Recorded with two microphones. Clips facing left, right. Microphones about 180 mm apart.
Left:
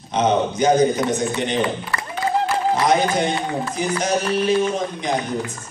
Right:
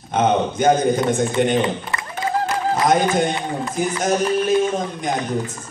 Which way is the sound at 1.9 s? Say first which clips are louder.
Left 1 dB; 20° right (ahead or behind).